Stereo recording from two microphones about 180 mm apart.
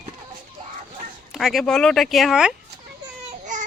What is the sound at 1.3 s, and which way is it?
Speech, centre (ahead or behind).